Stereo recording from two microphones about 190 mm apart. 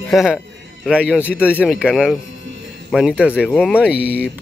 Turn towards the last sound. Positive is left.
turn(degrees=-5)  # may be behind; listen again after turning